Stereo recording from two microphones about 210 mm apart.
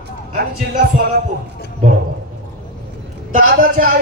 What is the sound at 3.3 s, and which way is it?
Speech, 40° right (ahead or behind).